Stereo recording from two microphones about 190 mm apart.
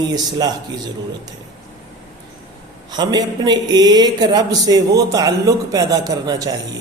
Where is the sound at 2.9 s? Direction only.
20° right (ahead or behind).